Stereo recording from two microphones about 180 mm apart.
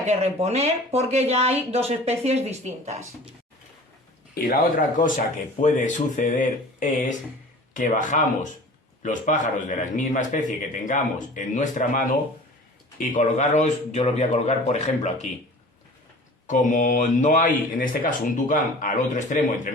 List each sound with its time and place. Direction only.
0.1 s speech: 35° right (ahead or behind)
4.4 s a man's voice: 50° left (ahead or behind)
16.5 s speech: 45° left (ahead or behind)